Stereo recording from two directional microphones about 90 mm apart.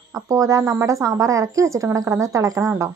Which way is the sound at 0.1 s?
35° right (ahead or behind).